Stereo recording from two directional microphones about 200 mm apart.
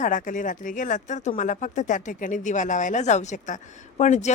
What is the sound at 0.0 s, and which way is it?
A woman's voice, 40° left (ahead or behind).